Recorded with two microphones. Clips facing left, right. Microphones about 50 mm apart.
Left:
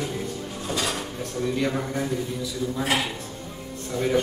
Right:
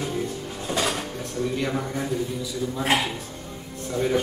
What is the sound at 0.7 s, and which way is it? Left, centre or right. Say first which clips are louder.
Drawer open or close: right 2 dB; right.